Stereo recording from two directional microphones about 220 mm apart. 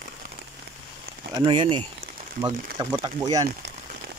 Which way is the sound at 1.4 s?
20° right (ahead or behind).